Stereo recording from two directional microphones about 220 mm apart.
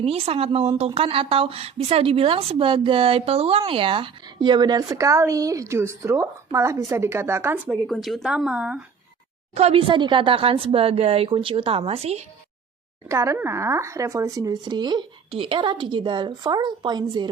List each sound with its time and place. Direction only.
0.0 s a woman's voice: 25° right (ahead or behind); by 7.6 s 10° right (ahead or behind)
7.7 s speech: centre (ahead or behind)
9.6 s a woman's voice: 25° right (ahead or behind)
13.1 s a woman's voice: 15° right (ahead or behind)